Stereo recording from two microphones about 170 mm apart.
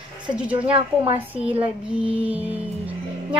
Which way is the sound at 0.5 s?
35° right (ahead or behind).